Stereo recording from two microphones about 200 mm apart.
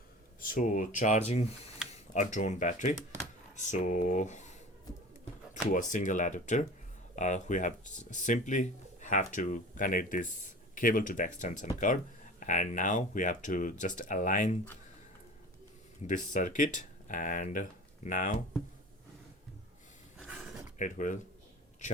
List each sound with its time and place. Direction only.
0.3 s speech: 45° left (ahead or behind)
5.7 s speech: 40° left (ahead or behind)
16.0 s speech: 40° left (ahead or behind)
20.1 s a sound: 5° right (ahead or behind)
20.7 s a man's voice: 40° left (ahead or behind)